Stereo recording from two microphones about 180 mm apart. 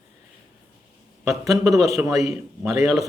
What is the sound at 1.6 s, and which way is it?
Speech, 15° right (ahead or behind).